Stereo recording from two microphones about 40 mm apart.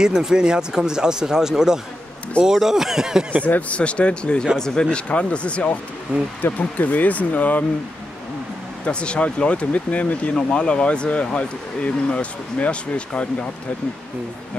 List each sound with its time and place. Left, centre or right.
0.0 s speech: centre
3.4 s speech: left; by 4.8 s centre
4.9 s speech: left
6.1 s speech: right
6.8 s speech: left
8.8 s speech: left
9.7 s speech: left
10.3 s speech: left